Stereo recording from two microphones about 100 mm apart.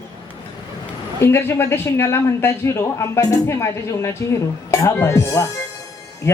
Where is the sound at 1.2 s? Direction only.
25° left (ahead or behind).